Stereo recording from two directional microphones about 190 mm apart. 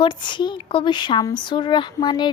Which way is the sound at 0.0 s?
25° left (ahead or behind).